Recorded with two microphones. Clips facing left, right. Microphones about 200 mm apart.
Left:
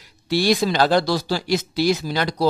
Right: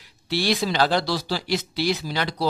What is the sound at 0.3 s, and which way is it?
Speech, 45° left (ahead or behind).